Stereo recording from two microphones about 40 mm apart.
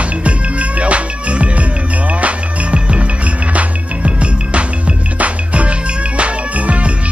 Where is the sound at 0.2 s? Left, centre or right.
Right.